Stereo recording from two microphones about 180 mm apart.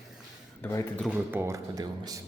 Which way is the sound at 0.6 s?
10° left (ahead or behind).